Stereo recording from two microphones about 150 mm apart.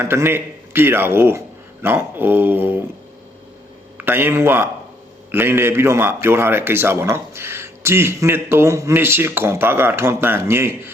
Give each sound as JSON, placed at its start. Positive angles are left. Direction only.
{"t": 0.0, "sound": "a man's voice", "side_deg": -15}
{"t": 3.9, "sound": "a man's voice", "side_deg": -15}